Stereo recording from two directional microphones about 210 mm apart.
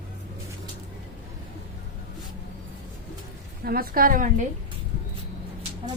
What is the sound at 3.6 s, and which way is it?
Speech, 45° right (ahead or behind).